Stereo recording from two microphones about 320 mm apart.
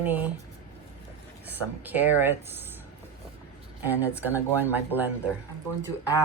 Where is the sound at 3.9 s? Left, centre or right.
Centre.